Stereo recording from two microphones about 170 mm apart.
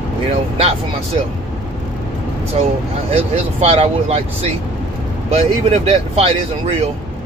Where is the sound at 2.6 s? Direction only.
40° right (ahead or behind).